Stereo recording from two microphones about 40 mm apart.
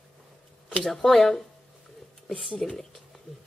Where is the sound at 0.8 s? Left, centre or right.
Centre.